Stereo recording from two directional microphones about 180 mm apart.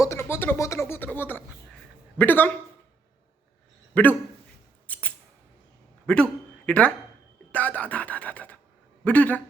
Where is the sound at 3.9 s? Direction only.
10° left (ahead or behind).